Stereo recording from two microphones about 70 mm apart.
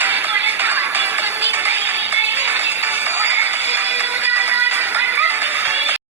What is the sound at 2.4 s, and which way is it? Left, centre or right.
Music, right.